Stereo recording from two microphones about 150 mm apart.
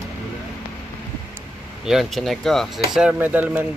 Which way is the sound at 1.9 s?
Centre (ahead or behind).